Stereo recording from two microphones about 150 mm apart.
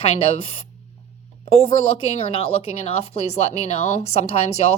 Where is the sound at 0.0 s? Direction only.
40° left (ahead or behind).